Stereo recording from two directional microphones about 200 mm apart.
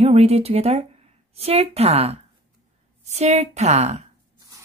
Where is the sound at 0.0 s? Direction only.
30° right (ahead or behind).